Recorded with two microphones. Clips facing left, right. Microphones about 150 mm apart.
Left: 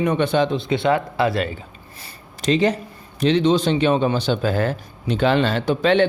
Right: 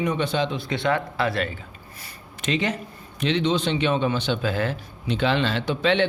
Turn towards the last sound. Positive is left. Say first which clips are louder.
# left 5 dB
turn(degrees=45)  # may be behind; listen again after turning